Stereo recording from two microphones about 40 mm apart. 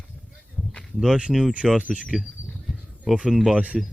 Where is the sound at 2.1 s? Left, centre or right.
Centre.